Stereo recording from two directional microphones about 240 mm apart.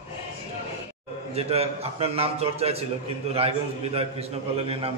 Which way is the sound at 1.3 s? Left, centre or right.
Right.